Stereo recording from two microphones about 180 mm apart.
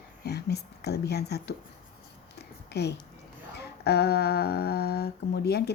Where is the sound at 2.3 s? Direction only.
65° left (ahead or behind).